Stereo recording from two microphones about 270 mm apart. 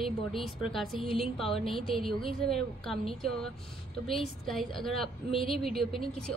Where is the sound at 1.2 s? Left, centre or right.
Centre.